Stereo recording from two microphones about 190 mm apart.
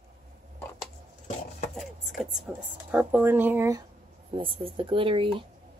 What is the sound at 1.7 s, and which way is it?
Speech, centre (ahead or behind).